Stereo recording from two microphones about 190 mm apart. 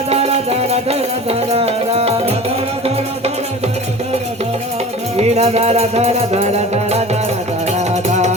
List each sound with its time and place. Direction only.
0.1 s music: 30° right (ahead or behind)
5.1 s music: 35° right (ahead or behind)